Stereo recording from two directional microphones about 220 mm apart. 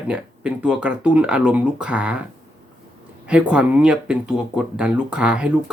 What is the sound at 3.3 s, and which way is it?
Speech, 5° right (ahead or behind).